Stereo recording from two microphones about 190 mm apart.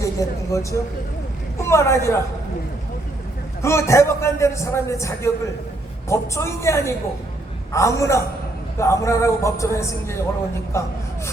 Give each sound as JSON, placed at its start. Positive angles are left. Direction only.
{"t": 0.0, "sound": "a man's voice", "side_deg": 15}
{"t": 3.6, "sound": "a man's voice", "side_deg": 15}